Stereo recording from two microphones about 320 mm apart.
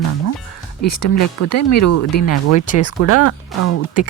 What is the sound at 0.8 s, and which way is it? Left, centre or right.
Speech, left.